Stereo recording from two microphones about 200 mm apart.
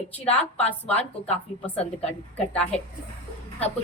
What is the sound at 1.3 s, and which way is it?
Speech, 30° left (ahead or behind).